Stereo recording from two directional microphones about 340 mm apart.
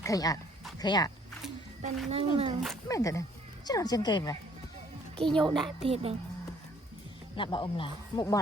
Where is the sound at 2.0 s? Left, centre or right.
Centre.